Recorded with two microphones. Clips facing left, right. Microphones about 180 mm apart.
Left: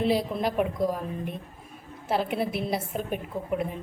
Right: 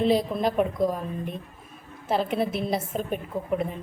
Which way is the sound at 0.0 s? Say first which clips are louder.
Right 3 dB; 5° left (ahead or behind).